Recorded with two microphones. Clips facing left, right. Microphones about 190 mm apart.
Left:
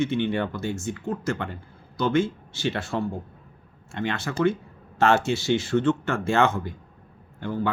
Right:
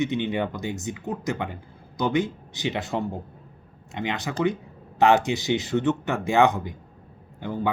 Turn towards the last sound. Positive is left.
turn(degrees=-15)  # may be behind; listen again after turning